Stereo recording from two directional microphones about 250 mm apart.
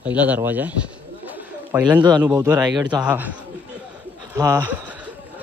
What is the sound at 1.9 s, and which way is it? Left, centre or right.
Speech, centre.